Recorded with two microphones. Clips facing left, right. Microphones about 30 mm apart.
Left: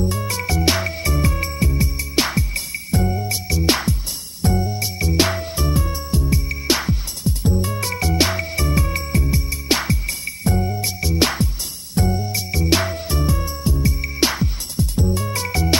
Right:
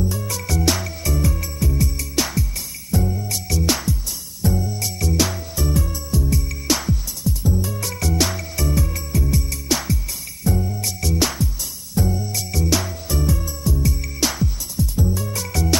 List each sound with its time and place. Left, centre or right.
0.0 s music: left
1.7 s music: left
2.1 s music: left
4.4 s music: left
4.6 s music: left
5.1 s music: left
7.2 s music: left
9.2 s music: left
9.7 s music: left
11.9 s music: left
14.8 s music: left